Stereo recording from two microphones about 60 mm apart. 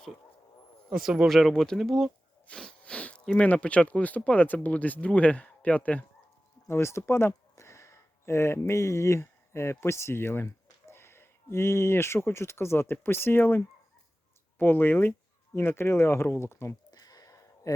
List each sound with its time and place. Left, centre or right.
0.9 s speech: centre
1.3 s speech: centre
2.5 s speech: left
2.8 s a sound: left
3.3 s speech: left
6.7 s speech: left
14.6 s speech: left
16.9 s a sound: left